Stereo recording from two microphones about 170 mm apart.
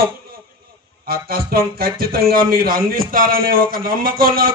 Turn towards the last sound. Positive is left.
turn(degrees=-60)  # may be behind; listen again after turning